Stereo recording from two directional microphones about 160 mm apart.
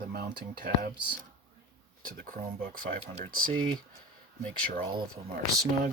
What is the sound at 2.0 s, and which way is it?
Speech, 65° right (ahead or behind).